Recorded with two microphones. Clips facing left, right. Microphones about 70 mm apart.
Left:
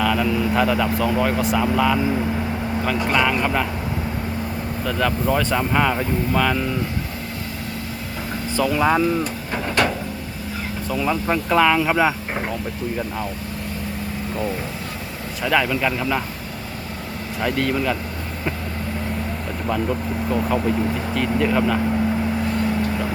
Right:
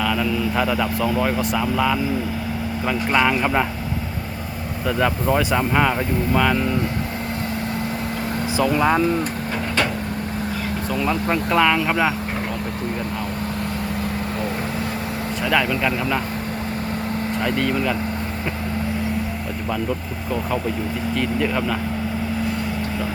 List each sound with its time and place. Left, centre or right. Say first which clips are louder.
0.0 s vehicle: left 2 dB; centre
0.5 s speech: left 2 dB; centre
4.9 s speech: right 1 dB; centre
8.5 s speech: even; centre
10.8 s speech: left 1 dB; centre
15.4 s speech: left 1 dB; centre
17.4 s speech: left 2 dB; centre
21.2 s speech: left 3 dB; centre